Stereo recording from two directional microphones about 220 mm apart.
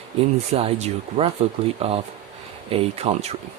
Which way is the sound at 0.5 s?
30° right (ahead or behind).